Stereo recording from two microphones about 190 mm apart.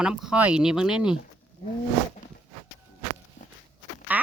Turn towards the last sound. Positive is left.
turn(degrees=-10)  # may be behind; listen again after turning